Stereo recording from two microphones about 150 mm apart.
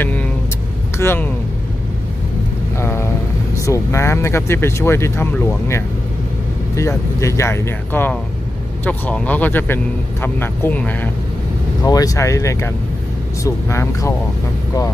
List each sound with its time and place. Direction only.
0.0 s vehicle: 10° left (ahead or behind)
0.9 s speech: 15° left (ahead or behind)
2.8 s a sound: 15° left (ahead or behind)
3.5 s speech: 20° left (ahead or behind)
7.2 s speech: 20° left (ahead or behind)
11.8 s speech: 25° left (ahead or behind)